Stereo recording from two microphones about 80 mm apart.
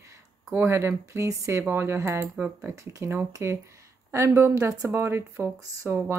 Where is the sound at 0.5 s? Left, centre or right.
Right.